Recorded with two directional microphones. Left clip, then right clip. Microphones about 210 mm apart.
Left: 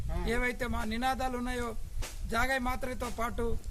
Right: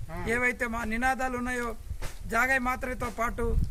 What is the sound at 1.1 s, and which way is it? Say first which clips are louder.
Speech: right 3 dB; 5° left (ahead or behind).